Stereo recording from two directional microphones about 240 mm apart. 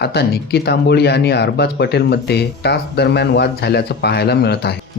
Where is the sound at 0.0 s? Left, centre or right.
Left.